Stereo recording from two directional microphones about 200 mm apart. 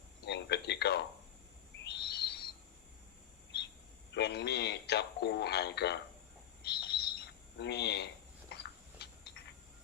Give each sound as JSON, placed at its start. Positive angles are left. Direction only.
{"t": 0.3, "sound": "speech", "side_deg": 55}
{"t": 1.8, "sound": "owl", "side_deg": 55}
{"t": 4.1, "sound": "speech", "side_deg": 55}
{"t": 6.7, "sound": "bird", "side_deg": 55}
{"t": 9.0, "sound": "a sound", "side_deg": 55}